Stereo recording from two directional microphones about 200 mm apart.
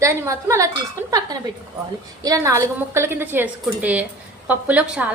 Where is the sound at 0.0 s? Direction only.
15° right (ahead or behind).